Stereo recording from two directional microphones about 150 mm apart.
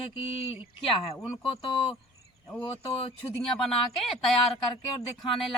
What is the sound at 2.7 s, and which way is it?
Speech, 40° left (ahead or behind).